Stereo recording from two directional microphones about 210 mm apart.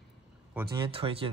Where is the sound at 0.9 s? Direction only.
25° right (ahead or behind).